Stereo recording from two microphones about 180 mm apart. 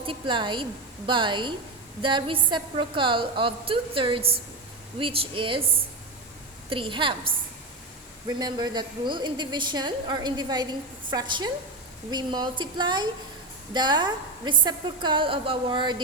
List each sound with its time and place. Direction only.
0.0 s a woman's voice: 30° right (ahead or behind)
8.3 s a woman's voice: 25° right (ahead or behind)